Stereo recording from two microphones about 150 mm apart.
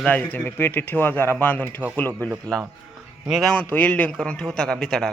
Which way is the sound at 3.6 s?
10° left (ahead or behind).